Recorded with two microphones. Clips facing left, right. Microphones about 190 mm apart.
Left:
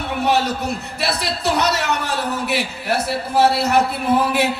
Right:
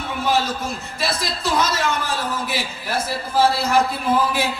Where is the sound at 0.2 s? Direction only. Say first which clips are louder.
Left 2 dB; 65° left (ahead or behind).